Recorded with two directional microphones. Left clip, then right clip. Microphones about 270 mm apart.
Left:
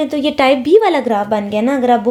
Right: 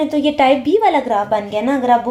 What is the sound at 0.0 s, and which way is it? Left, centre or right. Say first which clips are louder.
A woman's voice: even; left.